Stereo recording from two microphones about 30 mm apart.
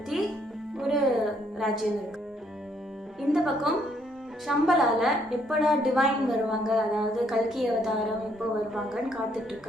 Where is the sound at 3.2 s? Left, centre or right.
Centre.